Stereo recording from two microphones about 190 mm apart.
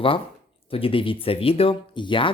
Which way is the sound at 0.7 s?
30° left (ahead or behind).